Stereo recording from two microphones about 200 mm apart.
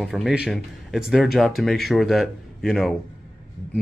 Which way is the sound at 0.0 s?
Centre (ahead or behind).